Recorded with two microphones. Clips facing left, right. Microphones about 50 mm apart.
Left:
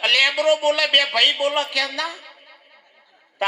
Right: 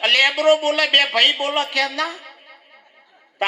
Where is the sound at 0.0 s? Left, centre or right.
Right.